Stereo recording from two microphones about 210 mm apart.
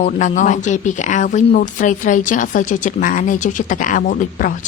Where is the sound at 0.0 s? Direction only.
35° left (ahead or behind).